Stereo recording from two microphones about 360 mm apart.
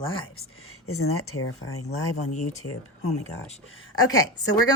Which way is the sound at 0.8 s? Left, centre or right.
Left.